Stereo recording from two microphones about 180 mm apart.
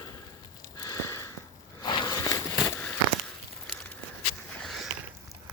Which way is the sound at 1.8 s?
25° left (ahead or behind).